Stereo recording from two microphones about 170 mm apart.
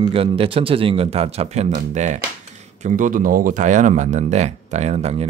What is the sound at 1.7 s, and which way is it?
Speech, 50° right (ahead or behind).